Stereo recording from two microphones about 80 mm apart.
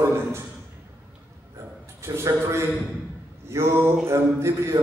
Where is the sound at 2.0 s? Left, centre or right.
Right.